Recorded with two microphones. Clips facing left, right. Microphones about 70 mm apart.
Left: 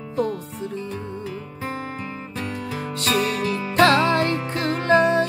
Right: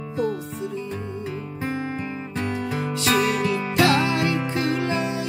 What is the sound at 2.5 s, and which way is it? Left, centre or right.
Music, centre.